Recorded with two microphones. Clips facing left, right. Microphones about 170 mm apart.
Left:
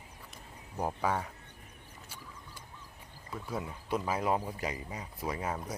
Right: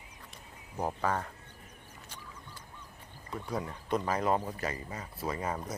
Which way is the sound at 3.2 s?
5° left (ahead or behind).